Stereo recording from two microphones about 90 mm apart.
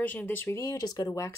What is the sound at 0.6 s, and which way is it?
Speech, 40° left (ahead or behind).